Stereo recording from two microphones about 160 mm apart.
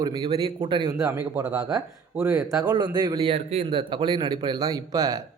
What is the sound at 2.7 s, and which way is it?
Speech, 30° right (ahead or behind).